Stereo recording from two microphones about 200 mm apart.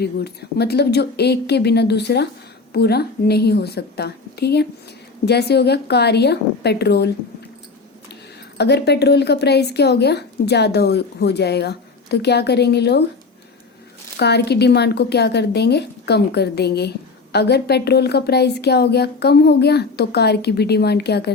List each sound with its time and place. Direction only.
0.5 s a woman's voice: 55° left (ahead or behind)
8.5 s a woman's voice: 55° left (ahead or behind)
14.2 s a woman's voice: 55° left (ahead or behind)